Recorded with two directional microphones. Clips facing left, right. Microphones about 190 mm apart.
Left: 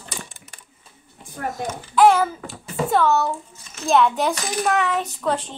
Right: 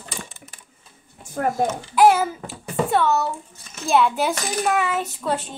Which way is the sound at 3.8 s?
10° right (ahead or behind).